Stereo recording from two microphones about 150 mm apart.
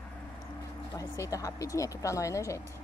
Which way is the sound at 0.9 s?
20° left (ahead or behind).